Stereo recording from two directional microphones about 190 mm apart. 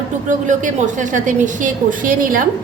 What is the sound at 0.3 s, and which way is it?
A woman's voice, 40° right (ahead or behind).